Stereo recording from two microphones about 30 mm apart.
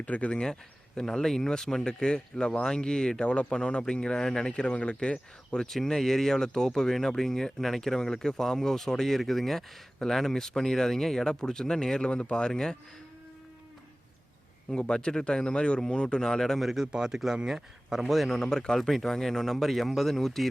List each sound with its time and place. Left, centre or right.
0.0 s speech: left
0.9 s speech: centre
4.6 s speech: left
5.8 s speech: centre
12.1 s speech: left
14.8 s speech: left
16.6 s speech: centre
16.8 s speech: right
18.0 s a man's voice: centre
18.3 s speech: left
18.8 s speech: centre